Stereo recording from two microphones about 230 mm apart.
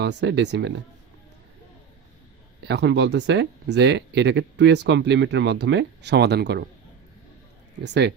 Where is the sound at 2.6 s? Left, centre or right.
Right.